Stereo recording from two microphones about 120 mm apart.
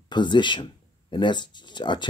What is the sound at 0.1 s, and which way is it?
Speech, 40° left (ahead or behind).